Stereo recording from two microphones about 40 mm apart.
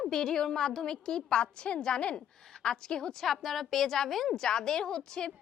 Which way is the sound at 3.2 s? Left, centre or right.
Centre.